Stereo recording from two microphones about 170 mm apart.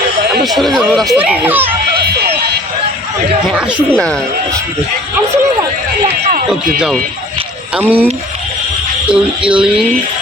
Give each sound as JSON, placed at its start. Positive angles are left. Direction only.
{"t": 0.4, "sound": "speech", "side_deg": 0}
{"t": 3.5, "sound": "speech", "side_deg": -10}
{"t": 3.9, "sound": "speech", "side_deg": 5}
{"t": 6.2, "sound": "speech", "side_deg": -50}
{"t": 6.7, "sound": "speech", "side_deg": -5}
{"t": 9.0, "sound": "speech", "side_deg": -5}